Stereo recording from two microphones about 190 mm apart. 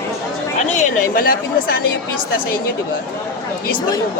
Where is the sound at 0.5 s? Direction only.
45° left (ahead or behind).